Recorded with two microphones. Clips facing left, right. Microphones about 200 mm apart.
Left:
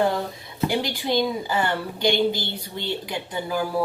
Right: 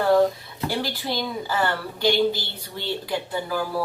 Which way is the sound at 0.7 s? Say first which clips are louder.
Left 3 dB; 20° left (ahead or behind).